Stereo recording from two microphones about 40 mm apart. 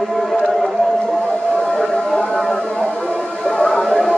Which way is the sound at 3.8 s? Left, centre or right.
Centre.